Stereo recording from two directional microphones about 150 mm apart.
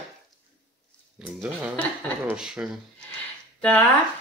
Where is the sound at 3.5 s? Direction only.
10° left (ahead or behind).